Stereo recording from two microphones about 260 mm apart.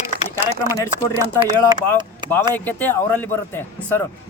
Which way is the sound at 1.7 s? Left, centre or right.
Centre.